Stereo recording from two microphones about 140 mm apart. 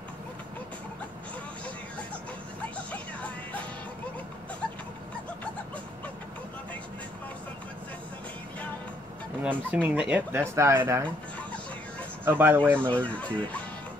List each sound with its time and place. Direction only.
2.9 s music: 10° left (ahead or behind)
9.4 s speech: 10° right (ahead or behind)
12.3 s speech: 15° right (ahead or behind)
12.7 s fowl: 10° left (ahead or behind)